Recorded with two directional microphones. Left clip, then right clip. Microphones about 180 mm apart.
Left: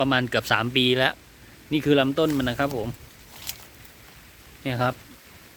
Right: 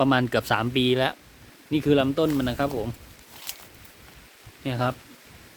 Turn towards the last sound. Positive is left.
turn(degrees=0)  # may be behind; listen again after turning